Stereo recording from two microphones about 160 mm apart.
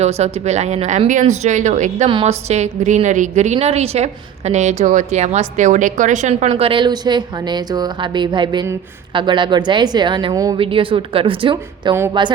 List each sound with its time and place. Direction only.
0.0 s a woman's voice: 40° right (ahead or behind)